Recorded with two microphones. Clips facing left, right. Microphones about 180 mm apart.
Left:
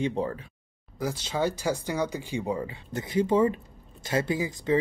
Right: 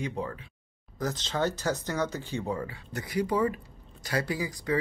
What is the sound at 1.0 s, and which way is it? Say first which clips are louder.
Speech: left 1 dB; 10° left (ahead or behind).